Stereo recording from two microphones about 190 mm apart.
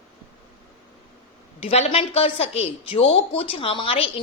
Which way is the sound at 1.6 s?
30° left (ahead or behind).